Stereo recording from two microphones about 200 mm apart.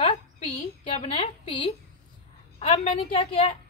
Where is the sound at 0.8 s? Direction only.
25° left (ahead or behind).